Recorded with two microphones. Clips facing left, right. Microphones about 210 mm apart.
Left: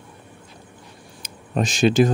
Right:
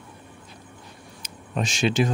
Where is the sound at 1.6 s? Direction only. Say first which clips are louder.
Left 6 dB; 35° left (ahead or behind).